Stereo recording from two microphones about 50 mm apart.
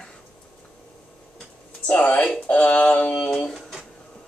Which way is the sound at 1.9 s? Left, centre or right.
Left.